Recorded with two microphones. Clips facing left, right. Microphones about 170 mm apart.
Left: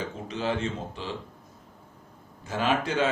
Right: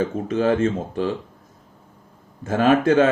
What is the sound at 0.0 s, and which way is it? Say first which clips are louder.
Speech: right 10 dB; 50° right (ahead or behind).